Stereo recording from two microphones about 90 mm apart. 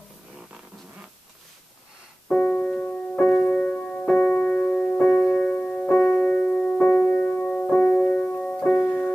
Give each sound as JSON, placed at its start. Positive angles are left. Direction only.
{"t": 2.2, "sound": "music", "side_deg": 15}
{"t": 8.7, "sound": "music", "side_deg": 25}